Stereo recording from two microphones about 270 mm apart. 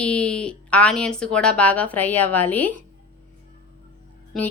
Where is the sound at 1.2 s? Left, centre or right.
Centre.